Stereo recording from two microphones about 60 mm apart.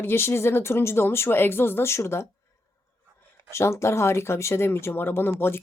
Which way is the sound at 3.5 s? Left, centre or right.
Left.